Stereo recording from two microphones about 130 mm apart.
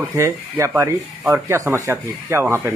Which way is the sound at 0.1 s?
20° right (ahead or behind).